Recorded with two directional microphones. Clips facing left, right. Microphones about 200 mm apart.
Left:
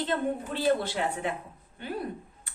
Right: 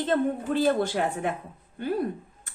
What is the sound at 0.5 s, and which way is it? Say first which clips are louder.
Speech: right 4 dB; 45° right (ahead or behind).